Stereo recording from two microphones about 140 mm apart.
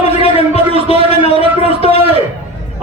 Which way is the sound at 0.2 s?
45° left (ahead or behind).